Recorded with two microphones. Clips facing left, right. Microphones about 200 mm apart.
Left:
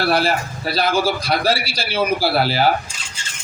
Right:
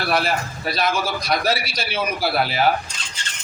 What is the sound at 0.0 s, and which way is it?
A man's voice, 30° left (ahead or behind).